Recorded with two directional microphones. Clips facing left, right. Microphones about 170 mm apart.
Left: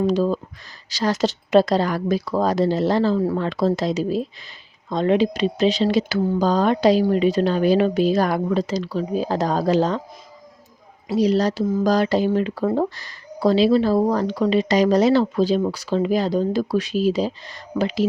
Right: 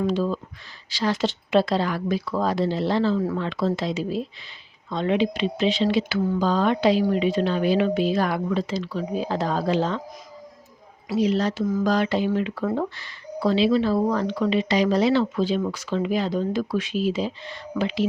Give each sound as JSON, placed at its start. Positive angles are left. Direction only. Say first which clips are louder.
{"t": 0.0, "sound": "speech", "louder": "left 4 dB", "side_deg": 40}
{"t": 11.1, "sound": "speech", "louder": "left 3 dB", "side_deg": 40}